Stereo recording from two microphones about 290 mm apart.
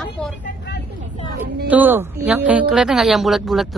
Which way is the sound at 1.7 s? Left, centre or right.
Centre.